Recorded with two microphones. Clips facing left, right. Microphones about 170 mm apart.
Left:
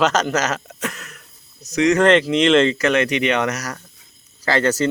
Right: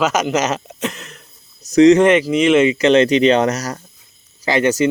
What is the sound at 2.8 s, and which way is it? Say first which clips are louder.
Speech: right 6 dB; 25° right (ahead or behind).